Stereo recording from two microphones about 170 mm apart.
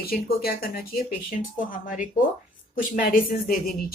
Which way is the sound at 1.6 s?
50° left (ahead or behind).